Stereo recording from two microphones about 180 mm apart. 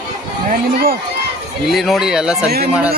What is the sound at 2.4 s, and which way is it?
Speech, 60° right (ahead or behind).